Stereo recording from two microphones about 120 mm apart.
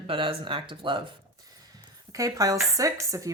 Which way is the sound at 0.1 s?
45° right (ahead or behind).